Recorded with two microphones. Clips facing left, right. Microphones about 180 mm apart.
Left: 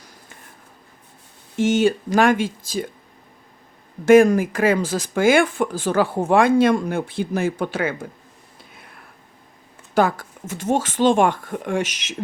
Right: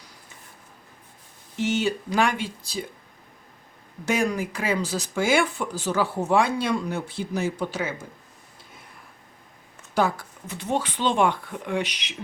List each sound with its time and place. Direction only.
1.5 s speech: 50° left (ahead or behind)
4.0 s speech: 50° left (ahead or behind)
9.9 s speech: 50° left (ahead or behind)